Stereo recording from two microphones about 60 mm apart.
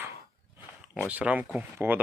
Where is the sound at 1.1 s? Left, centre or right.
Right.